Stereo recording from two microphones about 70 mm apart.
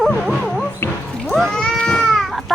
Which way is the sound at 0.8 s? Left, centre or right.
Left.